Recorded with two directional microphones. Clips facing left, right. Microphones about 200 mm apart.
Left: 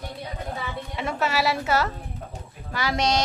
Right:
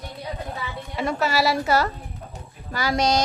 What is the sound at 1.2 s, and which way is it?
Speech, 35° right (ahead or behind).